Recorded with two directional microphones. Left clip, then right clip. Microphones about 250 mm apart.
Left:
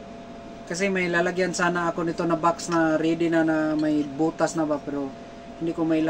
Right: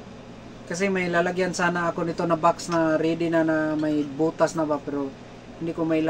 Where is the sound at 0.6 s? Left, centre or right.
Centre.